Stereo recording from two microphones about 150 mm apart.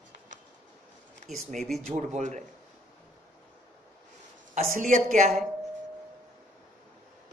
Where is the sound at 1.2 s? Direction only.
55° right (ahead or behind).